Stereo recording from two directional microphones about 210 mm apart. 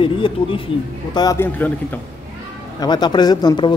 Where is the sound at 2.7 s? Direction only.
20° left (ahead or behind).